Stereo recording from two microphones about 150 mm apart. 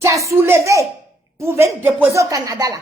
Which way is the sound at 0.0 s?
20° right (ahead or behind).